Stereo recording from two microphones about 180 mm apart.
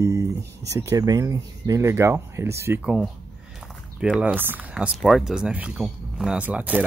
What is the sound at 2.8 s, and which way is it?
Speech, 5° right (ahead or behind).